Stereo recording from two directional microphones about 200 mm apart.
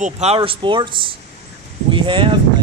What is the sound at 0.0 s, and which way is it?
Speech, 30° right (ahead or behind).